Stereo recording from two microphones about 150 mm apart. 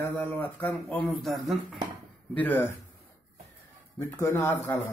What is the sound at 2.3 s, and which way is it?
Speech, 10° left (ahead or behind).